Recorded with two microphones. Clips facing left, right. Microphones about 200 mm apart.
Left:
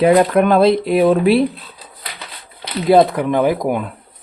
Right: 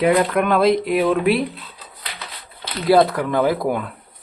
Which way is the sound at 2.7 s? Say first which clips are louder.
Left 3 dB; 20° left (ahead or behind).